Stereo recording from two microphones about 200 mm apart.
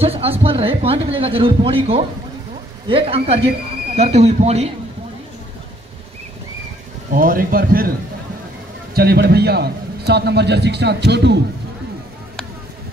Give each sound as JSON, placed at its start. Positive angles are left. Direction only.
{"t": 0.0, "sound": "speech", "side_deg": -30}
{"t": 7.2, "sound": "speech", "side_deg": -45}
{"t": 8.9, "sound": "a man's voice", "side_deg": -50}